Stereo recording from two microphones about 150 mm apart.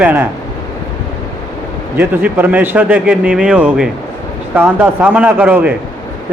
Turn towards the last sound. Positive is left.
turn(degrees=-10)  # may be behind; listen again after turning